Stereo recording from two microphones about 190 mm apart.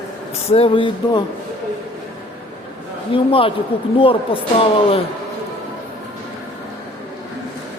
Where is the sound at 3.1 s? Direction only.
30° left (ahead or behind).